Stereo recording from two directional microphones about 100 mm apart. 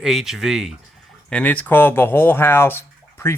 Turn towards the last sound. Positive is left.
turn(degrees=25)  # may be behind; listen again after turning